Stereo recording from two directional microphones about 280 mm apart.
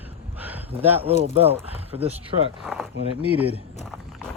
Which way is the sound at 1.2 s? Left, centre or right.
Right.